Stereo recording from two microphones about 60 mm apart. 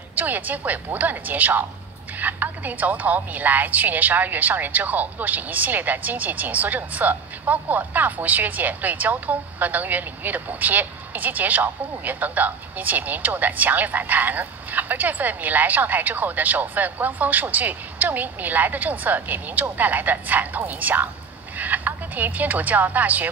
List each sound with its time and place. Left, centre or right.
0.1 s a woman's voice: right